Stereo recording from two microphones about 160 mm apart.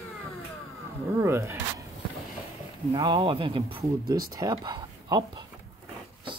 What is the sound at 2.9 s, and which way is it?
Speech, 30° right (ahead or behind).